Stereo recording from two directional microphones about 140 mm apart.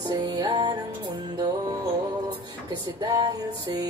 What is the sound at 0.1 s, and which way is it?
Music, 30° right (ahead or behind).